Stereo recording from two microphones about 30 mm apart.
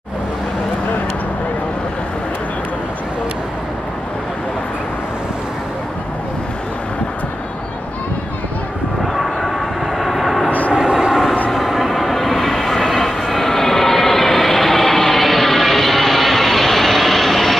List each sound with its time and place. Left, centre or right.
9.0 s vehicle: centre
10.7 s vehicle: right
11.5 s vehicle: centre